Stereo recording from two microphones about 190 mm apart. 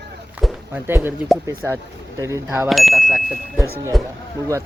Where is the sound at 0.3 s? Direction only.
5° right (ahead or behind).